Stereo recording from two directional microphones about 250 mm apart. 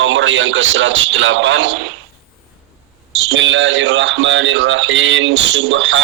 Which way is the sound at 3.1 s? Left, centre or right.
Right.